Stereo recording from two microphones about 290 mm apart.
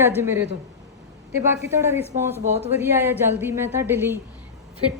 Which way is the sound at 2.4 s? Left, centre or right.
Right.